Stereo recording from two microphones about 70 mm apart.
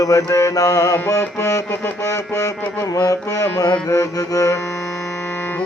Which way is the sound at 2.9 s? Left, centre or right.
Left.